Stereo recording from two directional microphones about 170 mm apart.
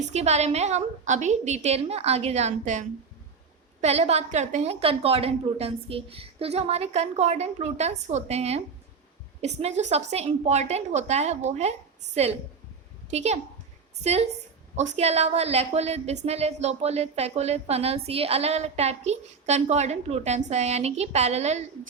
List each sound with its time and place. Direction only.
0.0 s a woman's voice: 40° right (ahead or behind)